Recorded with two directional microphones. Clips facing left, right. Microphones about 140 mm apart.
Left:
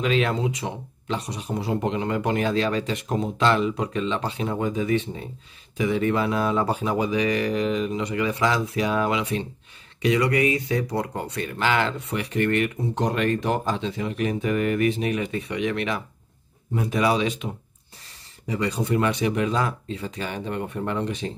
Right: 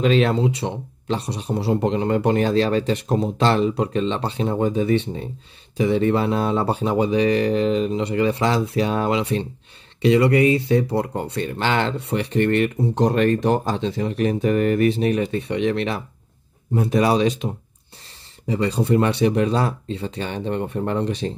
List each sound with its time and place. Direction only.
0.0 s speech: 35° right (ahead or behind)
18.5 s speech: 30° right (ahead or behind)